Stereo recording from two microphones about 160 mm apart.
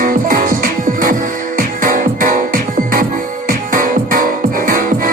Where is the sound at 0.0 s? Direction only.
60° right (ahead or behind).